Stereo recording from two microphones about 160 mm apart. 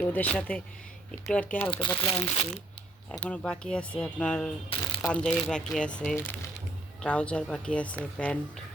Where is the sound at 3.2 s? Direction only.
5° left (ahead or behind).